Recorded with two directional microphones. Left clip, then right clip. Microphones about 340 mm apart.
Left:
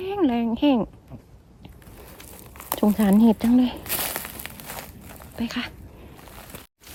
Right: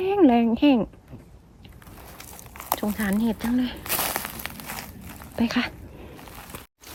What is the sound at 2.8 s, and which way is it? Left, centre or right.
Speech, centre.